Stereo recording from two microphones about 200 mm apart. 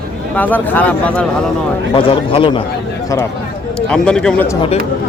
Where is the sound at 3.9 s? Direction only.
5° left (ahead or behind).